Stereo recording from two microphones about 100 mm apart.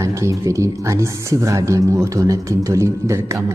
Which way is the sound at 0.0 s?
30° right (ahead or behind).